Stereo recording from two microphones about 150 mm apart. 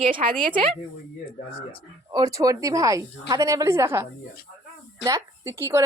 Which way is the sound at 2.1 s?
25° right (ahead or behind).